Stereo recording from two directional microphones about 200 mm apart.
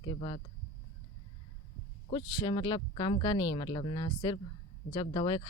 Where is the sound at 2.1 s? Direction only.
25° left (ahead or behind).